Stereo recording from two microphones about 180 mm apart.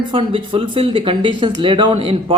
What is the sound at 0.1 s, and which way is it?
Speech, 30° right (ahead or behind).